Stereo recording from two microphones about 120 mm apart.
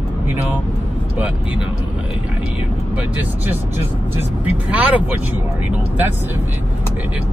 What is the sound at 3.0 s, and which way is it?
Speech, 15° right (ahead or behind).